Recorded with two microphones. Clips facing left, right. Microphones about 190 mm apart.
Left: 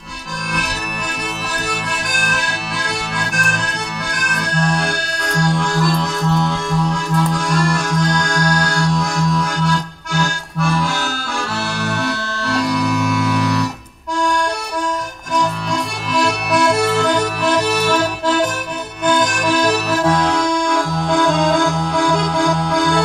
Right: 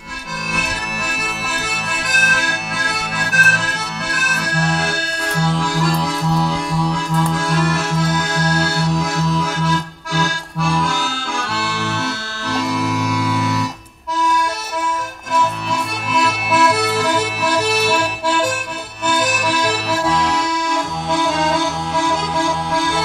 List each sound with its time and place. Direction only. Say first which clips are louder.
1.7 s accordion: left 2 dB; 5° right (ahead or behind)
16.1 s accordion: left 1 dB; 5° right (ahead or behind)
21.3 s accordion: left 3 dB; 50° left (ahead or behind)
22.8 s music: left 6 dB; 5° right (ahead or behind)